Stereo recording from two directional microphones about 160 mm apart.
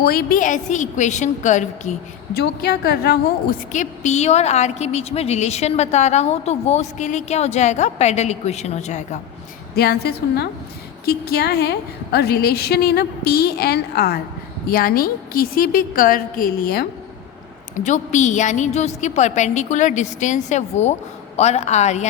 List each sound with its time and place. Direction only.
0.0 s a woman's voice: 70° left (ahead or behind); by 2.0 s 50° left (ahead or behind)
2.3 s a woman's voice: 75° left (ahead or behind)
3.7 s a woman's voice: 50° left (ahead or behind)
9.7 s a woman's voice: 85° left
11.0 s a woman's voice: 80° left
14.7 s a woman's voice: 65° left (ahead or behind)
17.7 s a woman's voice: 50° left (ahead or behind)